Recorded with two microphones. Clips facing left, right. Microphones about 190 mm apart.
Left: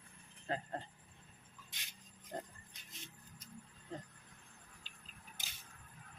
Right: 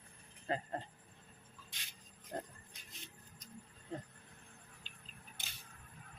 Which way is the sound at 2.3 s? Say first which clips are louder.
Right 2 dB; centre (ahead or behind).